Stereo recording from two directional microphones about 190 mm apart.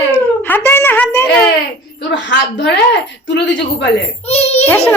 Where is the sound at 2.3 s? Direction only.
65° left (ahead or behind).